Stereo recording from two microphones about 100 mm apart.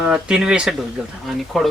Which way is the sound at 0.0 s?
10° right (ahead or behind).